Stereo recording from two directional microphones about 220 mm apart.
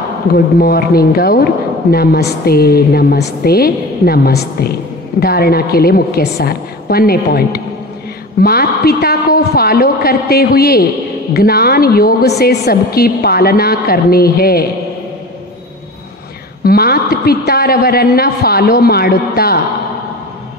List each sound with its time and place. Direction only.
0.6 s a woman's voice: 45° left (ahead or behind)
16.6 s a woman's voice: 45° left (ahead or behind)